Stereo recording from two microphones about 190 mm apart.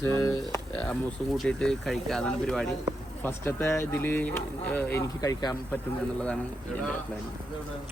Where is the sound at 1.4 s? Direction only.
5° left (ahead or behind).